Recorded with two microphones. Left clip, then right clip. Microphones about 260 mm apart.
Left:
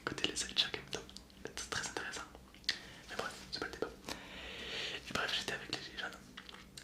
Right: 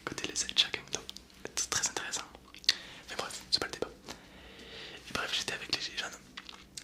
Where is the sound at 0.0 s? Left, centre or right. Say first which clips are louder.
Right 2 dB; centre.